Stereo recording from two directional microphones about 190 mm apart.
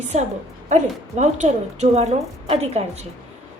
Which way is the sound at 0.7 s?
40° right (ahead or behind).